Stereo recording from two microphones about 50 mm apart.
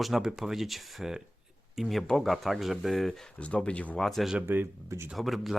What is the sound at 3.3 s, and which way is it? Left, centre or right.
Speech, left.